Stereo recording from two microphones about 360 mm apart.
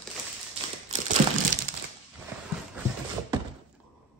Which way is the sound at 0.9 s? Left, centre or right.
Right.